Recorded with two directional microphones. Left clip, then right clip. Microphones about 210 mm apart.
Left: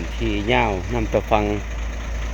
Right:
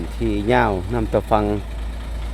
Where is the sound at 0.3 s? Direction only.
30° right (ahead or behind).